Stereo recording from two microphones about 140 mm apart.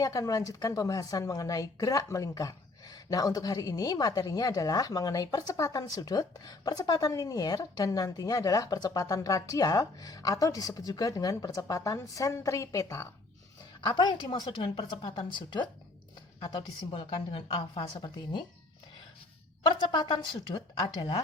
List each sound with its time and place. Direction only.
0.0 s a woman's voice: 25° left (ahead or behind)
13.8 s a woman's voice: 35° left (ahead or behind)
16.4 s a woman's voice: 35° left (ahead or behind)
19.6 s a woman's voice: 35° left (ahead or behind)